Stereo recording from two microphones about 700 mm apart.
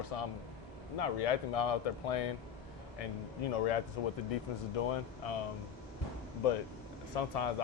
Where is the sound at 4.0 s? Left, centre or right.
Left.